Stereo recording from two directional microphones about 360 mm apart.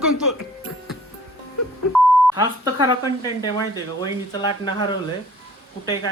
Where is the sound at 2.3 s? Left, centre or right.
Centre.